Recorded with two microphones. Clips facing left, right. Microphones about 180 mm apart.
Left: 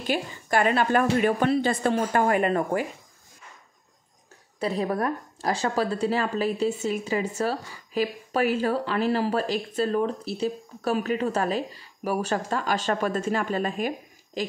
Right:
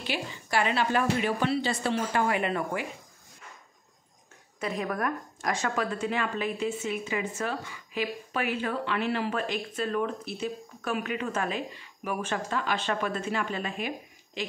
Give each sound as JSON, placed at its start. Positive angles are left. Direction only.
{"t": 0.0, "sound": "a woman's voice", "side_deg": 45}
{"t": 4.6, "sound": "a woman's voice", "side_deg": 30}